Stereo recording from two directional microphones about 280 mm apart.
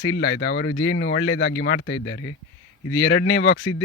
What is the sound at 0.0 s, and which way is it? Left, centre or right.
Speech, left.